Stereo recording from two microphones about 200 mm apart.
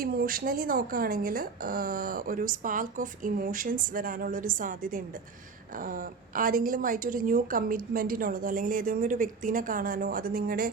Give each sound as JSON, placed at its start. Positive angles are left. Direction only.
{"t": 0.0, "sound": "speech", "side_deg": -45}